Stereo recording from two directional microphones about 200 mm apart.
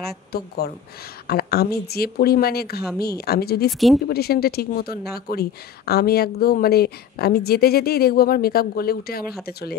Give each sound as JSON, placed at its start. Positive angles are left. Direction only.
{"t": 0.0, "sound": "speech", "side_deg": 50}